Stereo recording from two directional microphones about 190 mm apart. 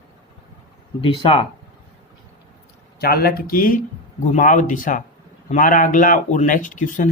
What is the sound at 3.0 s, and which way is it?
Speech, 55° left (ahead or behind).